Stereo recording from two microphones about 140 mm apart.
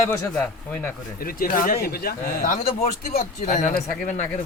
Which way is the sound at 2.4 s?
80° left.